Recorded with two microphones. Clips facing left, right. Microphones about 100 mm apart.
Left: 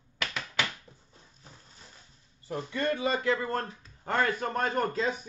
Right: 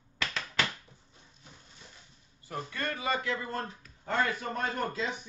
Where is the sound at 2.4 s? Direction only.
25° left (ahead or behind).